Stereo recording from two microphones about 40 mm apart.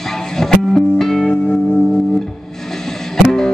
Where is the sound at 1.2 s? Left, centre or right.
Left.